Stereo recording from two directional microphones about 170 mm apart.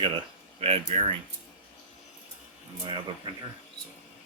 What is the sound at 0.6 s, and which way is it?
Speech, 40° right (ahead or behind).